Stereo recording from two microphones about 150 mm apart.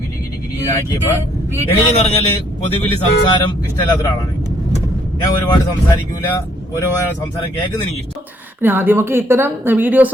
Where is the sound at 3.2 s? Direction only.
30° left (ahead or behind).